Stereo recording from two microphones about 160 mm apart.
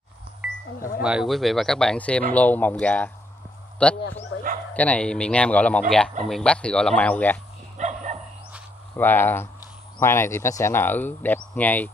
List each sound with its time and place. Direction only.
0.4 s a sound: 10° right (ahead or behind)
1.0 s speech: 5° right (ahead or behind)
7.7 s dog: 50° right (ahead or behind)
8.9 s speech: 15° left (ahead or behind)